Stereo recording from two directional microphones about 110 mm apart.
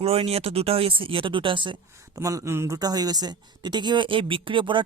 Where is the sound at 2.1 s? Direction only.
25° right (ahead or behind).